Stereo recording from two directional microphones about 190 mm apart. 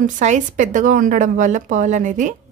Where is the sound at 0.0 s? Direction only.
40° right (ahead or behind).